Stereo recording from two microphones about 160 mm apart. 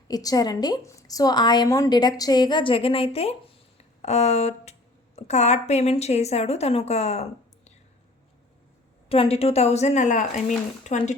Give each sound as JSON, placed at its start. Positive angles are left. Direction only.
{"t": 0.1, "sound": "a woman's voice", "side_deg": 25}
{"t": 9.0, "sound": "a woman's voice", "side_deg": 35}